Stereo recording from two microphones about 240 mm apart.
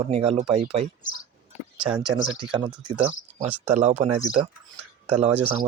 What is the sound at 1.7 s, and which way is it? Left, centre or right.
Speech, centre.